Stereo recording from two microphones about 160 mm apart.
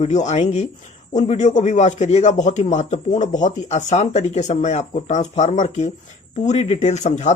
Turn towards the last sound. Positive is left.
turn(degrees=45)  # may be behind; listen again after turning